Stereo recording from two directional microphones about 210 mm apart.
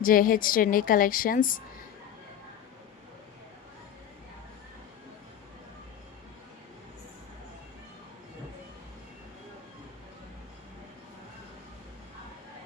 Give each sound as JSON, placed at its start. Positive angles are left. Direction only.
{"t": 0.0, "sound": "a woman's voice", "side_deg": 40}